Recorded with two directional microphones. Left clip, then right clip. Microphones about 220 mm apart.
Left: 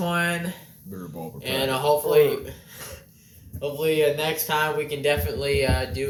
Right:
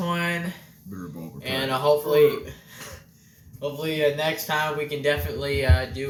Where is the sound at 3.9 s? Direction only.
10° right (ahead or behind).